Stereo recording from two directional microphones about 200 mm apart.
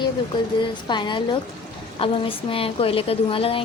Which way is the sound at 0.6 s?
20° left (ahead or behind).